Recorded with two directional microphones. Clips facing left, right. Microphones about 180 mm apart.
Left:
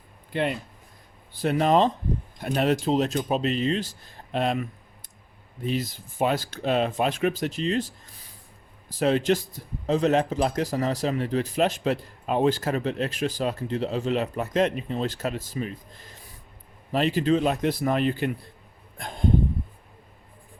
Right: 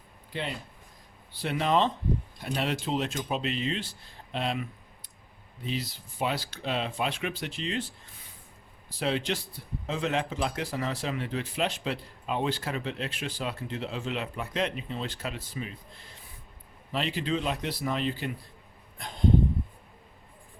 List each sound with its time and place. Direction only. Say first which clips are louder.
0.3 s speech: left 9 dB; 55° left (ahead or behind)
1.3 s speech: left 6 dB; 45° left (ahead or behind)
18.9 s a sound: left 1 dB; 50° left (ahead or behind)